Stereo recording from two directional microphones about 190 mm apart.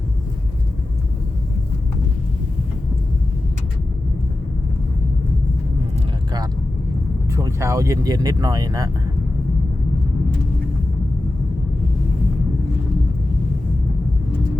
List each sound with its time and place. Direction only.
7.3 s speech: 15° right (ahead or behind)